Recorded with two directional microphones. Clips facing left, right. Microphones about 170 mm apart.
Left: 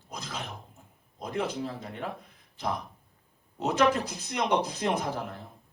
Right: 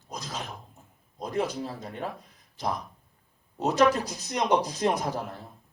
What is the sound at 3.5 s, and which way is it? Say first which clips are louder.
A man's voice: right 2 dB; 40° right (ahead or behind).